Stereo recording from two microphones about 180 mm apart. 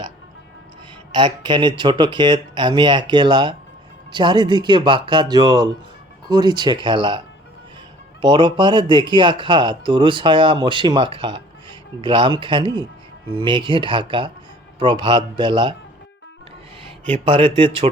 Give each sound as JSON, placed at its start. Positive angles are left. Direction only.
{"t": 1.1, "sound": "speech", "side_deg": -25}
{"t": 8.2, "sound": "speech", "side_deg": -25}
{"t": 17.2, "sound": "speech", "side_deg": -30}